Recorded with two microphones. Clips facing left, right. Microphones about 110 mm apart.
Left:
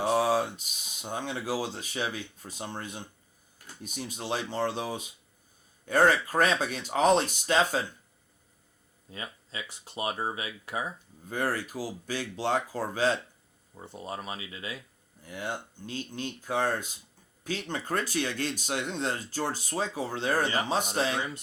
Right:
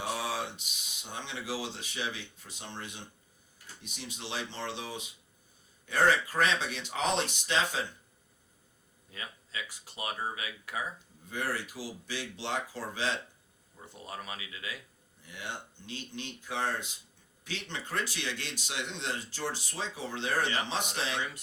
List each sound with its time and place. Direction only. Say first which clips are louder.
0.0 s speech: left 9 dB; 45° left (ahead or behind)
9.0 s speech: left 4 dB; 30° left (ahead or behind)
11.3 s speech: left 5 dB; 45° left (ahead or behind)
13.7 s speech: left 5 dB; 30° left (ahead or behind)
15.2 s speech: left 6 dB; 45° left (ahead or behind)